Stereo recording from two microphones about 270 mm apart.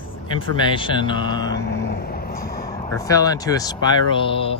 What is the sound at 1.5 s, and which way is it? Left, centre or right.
Vehicle, left.